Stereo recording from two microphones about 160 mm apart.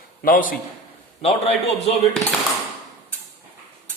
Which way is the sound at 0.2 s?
60° left (ahead or behind).